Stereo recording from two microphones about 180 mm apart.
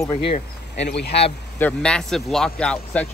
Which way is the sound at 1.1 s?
35° left (ahead or behind).